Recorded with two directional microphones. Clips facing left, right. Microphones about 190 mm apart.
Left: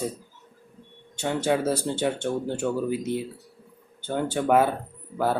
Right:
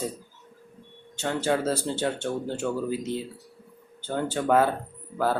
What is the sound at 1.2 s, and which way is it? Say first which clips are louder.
Speech: left 1 dB; 15° left (ahead or behind).